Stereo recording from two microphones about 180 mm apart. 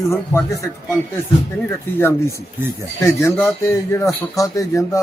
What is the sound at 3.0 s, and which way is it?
Speech, 15° left (ahead or behind).